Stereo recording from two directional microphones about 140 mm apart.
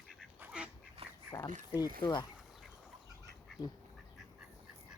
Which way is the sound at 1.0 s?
45° right (ahead or behind).